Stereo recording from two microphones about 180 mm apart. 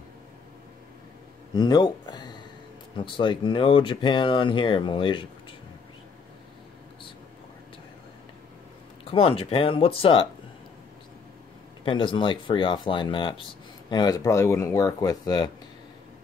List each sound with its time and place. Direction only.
1.5 s speech: 25° left (ahead or behind)
9.1 s speech: 30° left (ahead or behind)
11.8 s speech: 30° left (ahead or behind)